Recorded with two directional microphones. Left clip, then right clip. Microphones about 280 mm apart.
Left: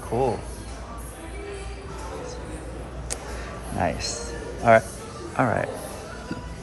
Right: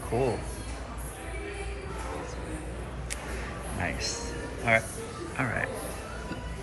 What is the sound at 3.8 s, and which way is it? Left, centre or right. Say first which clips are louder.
Speech: left 6 dB; centre.